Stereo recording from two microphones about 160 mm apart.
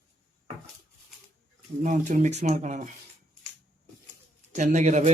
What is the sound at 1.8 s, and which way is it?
Speech, 50° right (ahead or behind).